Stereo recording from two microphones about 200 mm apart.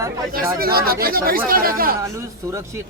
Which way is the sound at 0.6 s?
50° right (ahead or behind).